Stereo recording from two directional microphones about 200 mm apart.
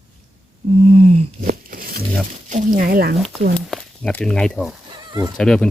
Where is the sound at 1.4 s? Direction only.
45° right (ahead or behind).